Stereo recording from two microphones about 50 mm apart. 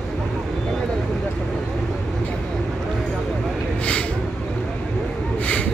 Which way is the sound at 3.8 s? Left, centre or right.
Left.